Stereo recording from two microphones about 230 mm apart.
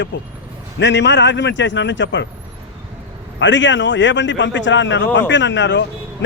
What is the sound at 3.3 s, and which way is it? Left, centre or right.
A man's voice, left.